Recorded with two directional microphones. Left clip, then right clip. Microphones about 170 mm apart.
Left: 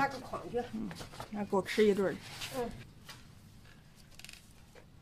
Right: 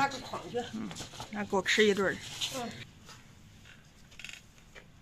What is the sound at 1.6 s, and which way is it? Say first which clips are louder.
Speech: right 3 dB; 10° left (ahead or behind).